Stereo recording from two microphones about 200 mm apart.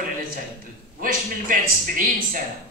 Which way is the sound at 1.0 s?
45° right (ahead or behind).